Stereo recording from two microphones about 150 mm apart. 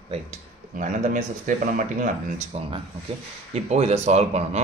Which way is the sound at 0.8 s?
60° right (ahead or behind).